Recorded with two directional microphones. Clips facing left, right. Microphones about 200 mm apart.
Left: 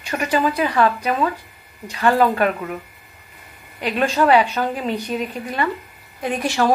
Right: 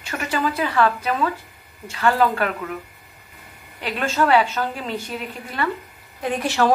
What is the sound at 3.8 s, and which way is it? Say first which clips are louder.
A woman's voice: left 3 dB; 15° left (ahead or behind).